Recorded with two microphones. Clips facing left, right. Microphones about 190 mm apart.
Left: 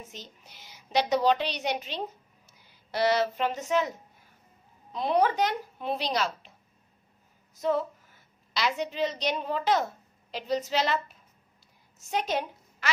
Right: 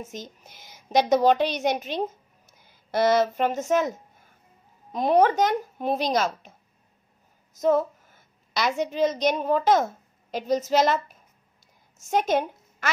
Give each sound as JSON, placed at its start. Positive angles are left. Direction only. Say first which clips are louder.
{"t": 0.0, "sound": "a woman's voice", "louder": "right 8 dB", "side_deg": -45}
{"t": 4.9, "sound": "a woman's voice", "louder": "right 5 dB", "side_deg": -45}
{"t": 7.5, "sound": "a woman's voice", "louder": "right 6 dB", "side_deg": -45}